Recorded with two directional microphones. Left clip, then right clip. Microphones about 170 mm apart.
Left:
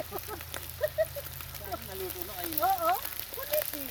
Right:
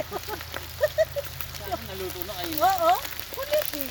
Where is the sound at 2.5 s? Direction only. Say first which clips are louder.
Right 6 dB; 50° right (ahead or behind).